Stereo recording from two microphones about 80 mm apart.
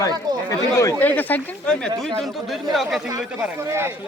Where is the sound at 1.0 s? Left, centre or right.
Left.